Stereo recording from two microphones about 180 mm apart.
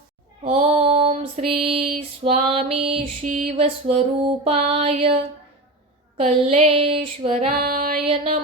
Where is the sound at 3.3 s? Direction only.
50° right (ahead or behind).